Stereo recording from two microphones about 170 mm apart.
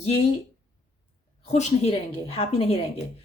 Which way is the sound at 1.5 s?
40° left (ahead or behind).